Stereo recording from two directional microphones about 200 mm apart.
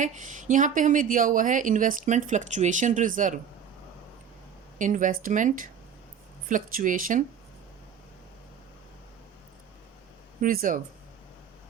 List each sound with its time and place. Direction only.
0.0 s a woman's voice: 40° right (ahead or behind)
4.8 s a woman's voice: 40° right (ahead or behind)
10.4 s speech: 45° right (ahead or behind)